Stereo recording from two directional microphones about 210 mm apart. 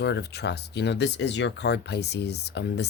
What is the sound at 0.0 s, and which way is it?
Speech, 55° left (ahead or behind).